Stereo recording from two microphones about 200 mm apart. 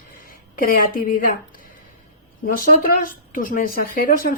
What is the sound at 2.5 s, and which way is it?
Speech, 45° left (ahead or behind).